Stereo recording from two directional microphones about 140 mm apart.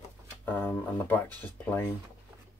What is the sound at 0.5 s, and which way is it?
Speech, 15° left (ahead or behind).